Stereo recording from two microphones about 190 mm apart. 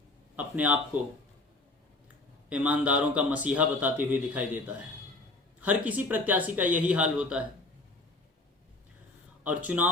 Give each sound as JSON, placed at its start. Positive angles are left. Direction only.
{"t": 0.3, "sound": "a man's voice", "side_deg": -10}
{"t": 2.5, "sound": "a man's voice", "side_deg": -5}
{"t": 9.4, "sound": "a man's voice", "side_deg": -10}